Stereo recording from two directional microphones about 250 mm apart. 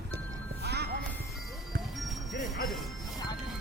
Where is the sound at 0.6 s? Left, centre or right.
Right.